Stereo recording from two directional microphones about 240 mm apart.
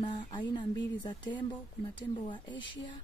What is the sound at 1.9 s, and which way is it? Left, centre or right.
Speech, centre.